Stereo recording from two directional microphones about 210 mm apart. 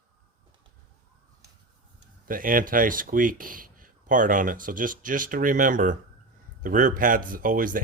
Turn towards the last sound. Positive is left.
turn(degrees=-40)  # may be behind; listen again after turning